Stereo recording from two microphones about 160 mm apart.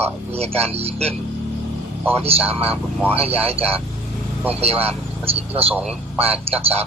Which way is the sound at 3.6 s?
35° right (ahead or behind).